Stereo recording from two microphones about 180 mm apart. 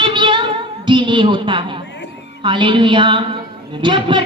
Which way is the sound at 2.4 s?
25° right (ahead or behind).